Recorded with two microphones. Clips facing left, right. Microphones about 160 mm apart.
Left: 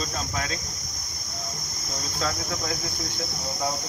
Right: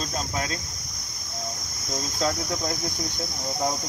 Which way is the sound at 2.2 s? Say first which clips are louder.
Right 3 dB; 35° right (ahead or behind).